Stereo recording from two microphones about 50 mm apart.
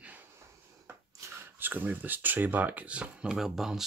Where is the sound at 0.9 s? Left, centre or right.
Right.